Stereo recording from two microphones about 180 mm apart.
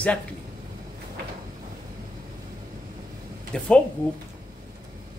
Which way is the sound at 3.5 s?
5° left (ahead or behind).